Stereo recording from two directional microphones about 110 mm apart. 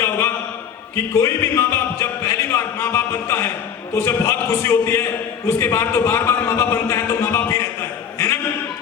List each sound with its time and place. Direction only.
0.9 s music: 25° left (ahead or behind)